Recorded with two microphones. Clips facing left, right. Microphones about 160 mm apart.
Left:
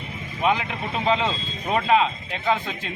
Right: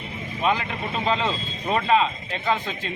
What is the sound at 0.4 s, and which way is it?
A man's voice, 10° left (ahead or behind).